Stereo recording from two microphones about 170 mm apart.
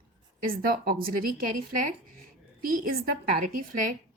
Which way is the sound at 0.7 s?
60° right (ahead or behind).